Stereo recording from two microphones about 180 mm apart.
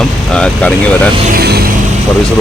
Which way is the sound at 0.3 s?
5° left (ahead or behind).